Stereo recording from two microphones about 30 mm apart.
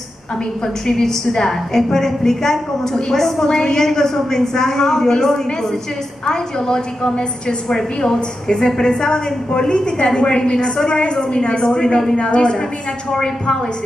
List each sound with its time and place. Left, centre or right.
0.8 s a woman's voice: centre
3.4 s a woman's voice: left
7.7 s a woman's voice: centre
12.2 s a woman's voice: left
13.1 s a woman's voice: centre